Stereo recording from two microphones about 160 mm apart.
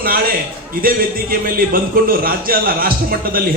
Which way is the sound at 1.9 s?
65° right (ahead or behind).